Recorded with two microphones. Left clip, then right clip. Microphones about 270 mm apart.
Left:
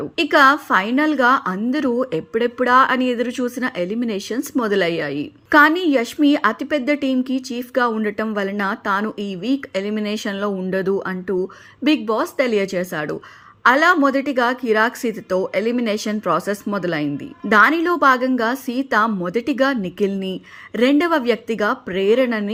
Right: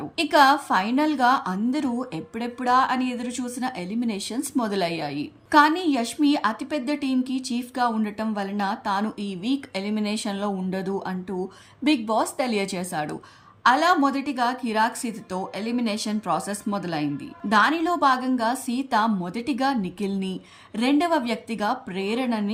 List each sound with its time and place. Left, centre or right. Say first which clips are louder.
0.2 s a woman's voice: left 4 dB; centre